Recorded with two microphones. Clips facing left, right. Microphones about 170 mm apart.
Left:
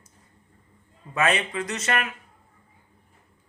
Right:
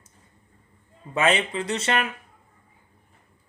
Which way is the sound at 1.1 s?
30° right (ahead or behind).